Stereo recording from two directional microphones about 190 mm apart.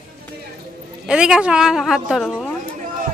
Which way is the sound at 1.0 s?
5° right (ahead or behind).